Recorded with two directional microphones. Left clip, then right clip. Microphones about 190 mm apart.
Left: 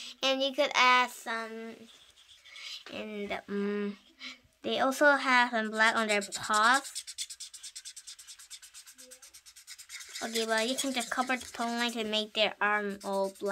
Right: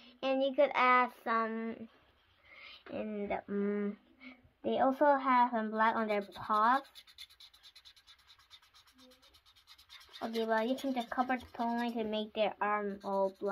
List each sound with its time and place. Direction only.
0.0 s a woman's voice: 15° left (ahead or behind)
1.2 s speech: 15° right (ahead or behind)
2.5 s speech: 10° right (ahead or behind); by 7.2 s 10° left (ahead or behind)
9.7 s speech: 10° left (ahead or behind); by 13.1 s 25° left (ahead or behind)
13.4 s a sound: 25° left (ahead or behind)